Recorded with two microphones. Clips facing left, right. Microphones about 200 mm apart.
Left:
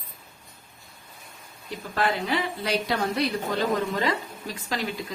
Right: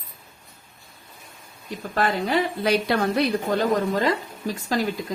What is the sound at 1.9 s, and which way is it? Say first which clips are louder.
A woman's voice: right 3 dB; 45° right (ahead or behind).